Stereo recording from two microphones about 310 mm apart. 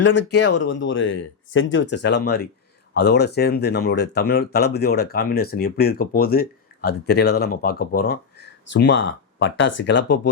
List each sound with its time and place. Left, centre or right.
0.0 s speech: left